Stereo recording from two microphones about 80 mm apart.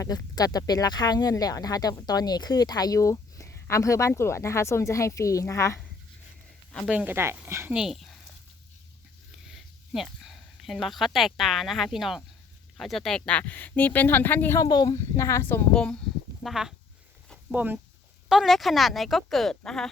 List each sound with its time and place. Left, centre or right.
0.0 s speech: left
6.9 s speech: right
7.7 s speech: centre
9.5 s speech: centre; by 14.6 s left
14.6 s speech: left
14.9 s speech: left
15.7 s speech: centre
16.4 s speech: centre
17.5 s speech: right
18.3 s speech: centre